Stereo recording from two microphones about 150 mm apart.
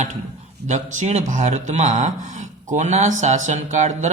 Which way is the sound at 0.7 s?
50° right (ahead or behind).